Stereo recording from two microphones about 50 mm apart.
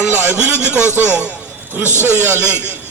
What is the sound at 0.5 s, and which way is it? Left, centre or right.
Speech, right.